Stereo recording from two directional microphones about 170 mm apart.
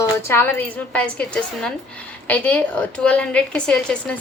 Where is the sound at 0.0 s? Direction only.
15° left (ahead or behind).